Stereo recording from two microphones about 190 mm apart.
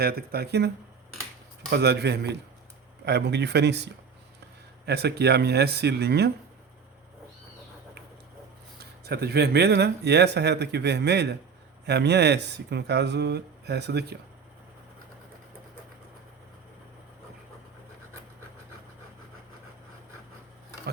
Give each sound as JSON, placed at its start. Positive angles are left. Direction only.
{"t": 0.0, "sound": "speech", "side_deg": -55}
{"t": 1.7, "sound": "speech", "side_deg": -60}
{"t": 4.9, "sound": "speech", "side_deg": -60}
{"t": 8.8, "sound": "speech", "side_deg": -55}